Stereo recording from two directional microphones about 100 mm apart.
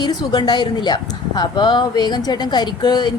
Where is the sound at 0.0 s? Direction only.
45° left (ahead or behind).